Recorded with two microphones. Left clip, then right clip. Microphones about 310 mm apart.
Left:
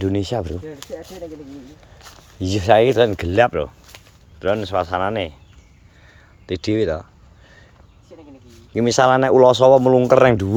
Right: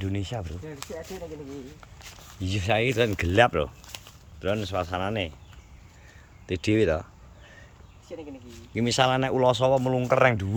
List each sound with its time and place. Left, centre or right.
0.0 s speech: centre
2.0 s speech: centre
3.9 s a sound: right
4.4 s speech: centre
6.4 s speech: centre
8.1 s a sound: right
8.7 s speech: centre